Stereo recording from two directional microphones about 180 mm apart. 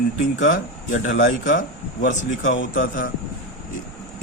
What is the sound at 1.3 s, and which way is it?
Speech, 45° left (ahead or behind).